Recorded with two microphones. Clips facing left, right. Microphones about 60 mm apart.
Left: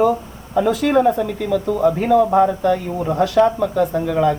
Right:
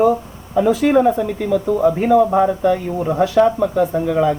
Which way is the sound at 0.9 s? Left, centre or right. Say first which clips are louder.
Right 1 dB; centre.